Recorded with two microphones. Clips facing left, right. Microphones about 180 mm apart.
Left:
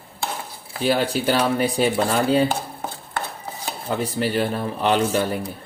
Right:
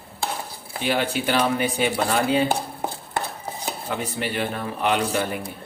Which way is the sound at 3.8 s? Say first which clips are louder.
Left 6 dB; 35° left (ahead or behind).